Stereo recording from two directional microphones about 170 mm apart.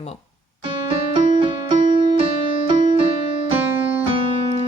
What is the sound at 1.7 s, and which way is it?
Music, 30° right (ahead or behind).